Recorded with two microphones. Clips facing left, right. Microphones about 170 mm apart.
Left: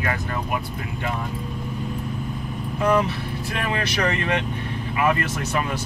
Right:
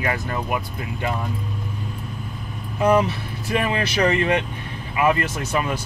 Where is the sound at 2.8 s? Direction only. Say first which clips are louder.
Right 3 dB; 15° right (ahead or behind).